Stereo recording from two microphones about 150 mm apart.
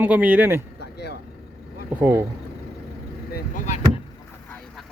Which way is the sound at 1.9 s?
10° right (ahead or behind).